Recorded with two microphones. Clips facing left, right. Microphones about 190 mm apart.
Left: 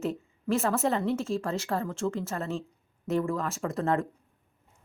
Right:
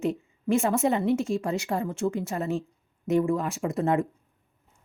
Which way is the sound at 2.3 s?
15° right (ahead or behind).